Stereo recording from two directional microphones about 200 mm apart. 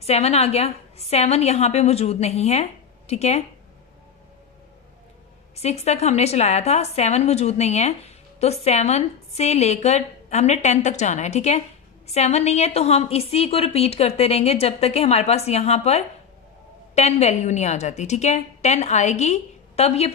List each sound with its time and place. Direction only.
0.0 s a woman's voice: 30° left (ahead or behind)
5.6 s a woman's voice: 30° left (ahead or behind)